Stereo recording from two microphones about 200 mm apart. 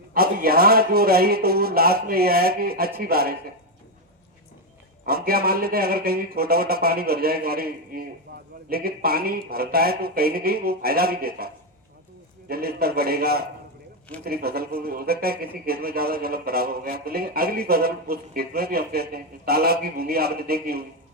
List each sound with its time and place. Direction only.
0.1 s a man's voice: 50° right (ahead or behind)
5.0 s a man's voice: 50° right (ahead or behind)
8.3 s a sound: 50° right (ahead or behind)
8.7 s a man's voice: 50° right (ahead or behind)